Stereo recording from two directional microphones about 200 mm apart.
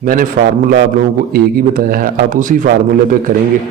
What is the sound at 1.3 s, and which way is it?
A man's voice, 45° right (ahead or behind).